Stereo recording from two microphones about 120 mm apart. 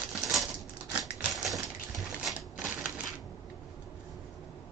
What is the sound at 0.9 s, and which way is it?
Typewriter, 5° right (ahead or behind).